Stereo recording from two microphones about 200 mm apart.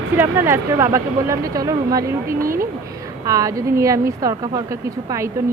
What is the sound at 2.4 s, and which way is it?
Speech, 45° right (ahead or behind).